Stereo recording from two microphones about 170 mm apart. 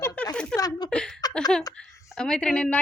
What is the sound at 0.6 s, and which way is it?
Speech, 20° left (ahead or behind).